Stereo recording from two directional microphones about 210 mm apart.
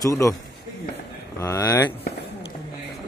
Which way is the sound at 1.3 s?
15° left (ahead or behind).